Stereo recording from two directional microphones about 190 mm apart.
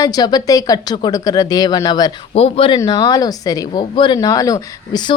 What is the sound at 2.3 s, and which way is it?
Speech, 30° left (ahead or behind).